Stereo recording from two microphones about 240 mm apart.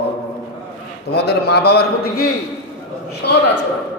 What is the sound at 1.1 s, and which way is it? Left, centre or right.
A man's voice, left.